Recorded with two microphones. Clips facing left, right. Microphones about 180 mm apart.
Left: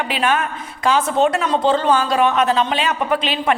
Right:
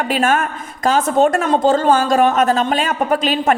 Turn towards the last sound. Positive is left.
turn(degrees=-45)  # may be behind; listen again after turning